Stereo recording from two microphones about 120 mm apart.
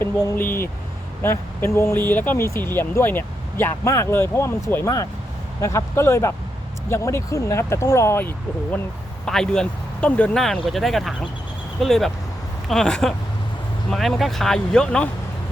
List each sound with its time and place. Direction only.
0.3 s speech: 20° left (ahead or behind)
5.5 s speech: 25° left (ahead or behind)
9.2 s speech: 5° left (ahead or behind)